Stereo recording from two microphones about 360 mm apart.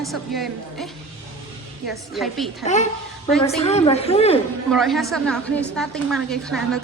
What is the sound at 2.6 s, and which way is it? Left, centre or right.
A woman's voice, centre.